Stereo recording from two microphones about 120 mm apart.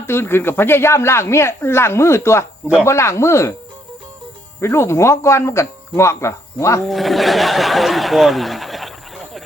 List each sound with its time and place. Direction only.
0.0 s speech: 20° left (ahead or behind)
4.6 s speech: 20° left (ahead or behind)
6.8 s speech: centre (ahead or behind)